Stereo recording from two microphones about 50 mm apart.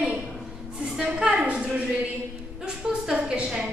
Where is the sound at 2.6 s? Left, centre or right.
Centre.